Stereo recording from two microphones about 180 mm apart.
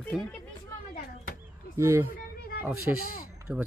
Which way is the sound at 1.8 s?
15° right (ahead or behind).